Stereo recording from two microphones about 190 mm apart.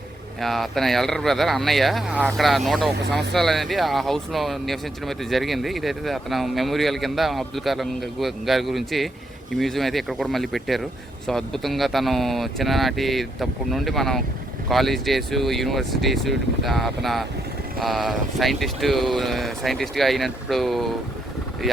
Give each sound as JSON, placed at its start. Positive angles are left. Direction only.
{"t": 0.3, "sound": "speech", "side_deg": 0}
{"t": 2.9, "sound": "speech", "side_deg": -60}
{"t": 3.3, "sound": "speech", "side_deg": 0}